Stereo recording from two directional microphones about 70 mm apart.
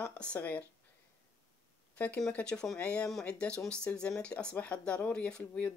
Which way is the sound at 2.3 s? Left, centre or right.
Centre.